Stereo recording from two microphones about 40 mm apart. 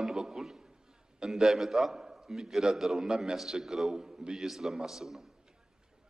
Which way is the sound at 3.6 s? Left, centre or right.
Centre.